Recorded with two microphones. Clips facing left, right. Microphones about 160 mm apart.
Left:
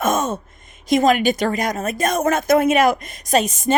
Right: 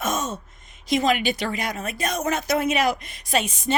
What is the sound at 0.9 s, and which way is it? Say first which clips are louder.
A woman's voice: left 6 dB; 45° left (ahead or behind).